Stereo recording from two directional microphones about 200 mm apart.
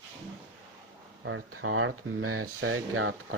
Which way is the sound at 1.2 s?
80° right.